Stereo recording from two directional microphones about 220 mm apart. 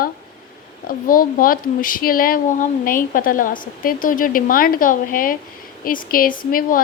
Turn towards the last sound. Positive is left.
turn(degrees=40)  # may be behind; listen again after turning